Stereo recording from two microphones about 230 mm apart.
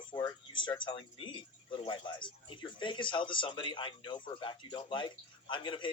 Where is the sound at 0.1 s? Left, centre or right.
Left.